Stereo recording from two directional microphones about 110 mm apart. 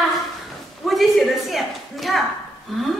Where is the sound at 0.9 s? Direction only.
Centre (ahead or behind).